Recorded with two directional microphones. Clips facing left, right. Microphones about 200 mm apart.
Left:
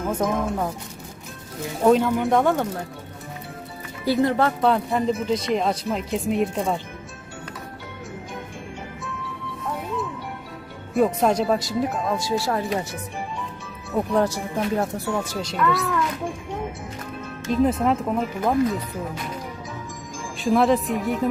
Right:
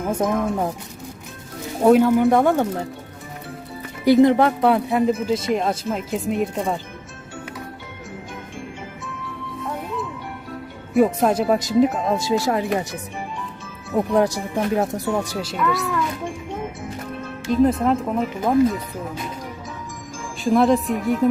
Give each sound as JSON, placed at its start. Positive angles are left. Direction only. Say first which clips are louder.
{"t": 0.1, "sound": "speech", "louder": "right 3 dB", "side_deg": -15}
{"t": 1.8, "sound": "speech", "louder": "right 4 dB", "side_deg": -10}
{"t": 4.0, "sound": "speech", "louder": "right 6 dB", "side_deg": -15}
{"t": 4.9, "sound": "speech", "louder": "right 3 dB", "side_deg": -5}
{"t": 10.9, "sound": "speech", "louder": "right 2 dB", "side_deg": 0}
{"t": 11.5, "sound": "speech", "louder": "right 6 dB", "side_deg": -20}
{"t": 13.9, "sound": "speech", "louder": "right 3 dB", "side_deg": -15}
{"t": 17.5, "sound": "speech", "louder": "right 3 dB", "side_deg": 0}
{"t": 20.4, "sound": "speech", "louder": "right 2 dB", "side_deg": 0}